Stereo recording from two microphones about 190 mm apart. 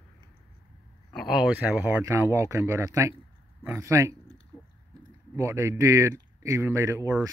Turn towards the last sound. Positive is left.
turn(degrees=-15)  # may be behind; listen again after turning